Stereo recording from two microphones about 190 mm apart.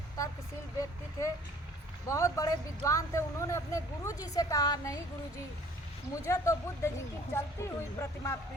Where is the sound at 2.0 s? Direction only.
15° left (ahead or behind).